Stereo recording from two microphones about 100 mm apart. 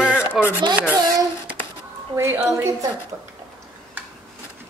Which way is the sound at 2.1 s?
30° right (ahead or behind).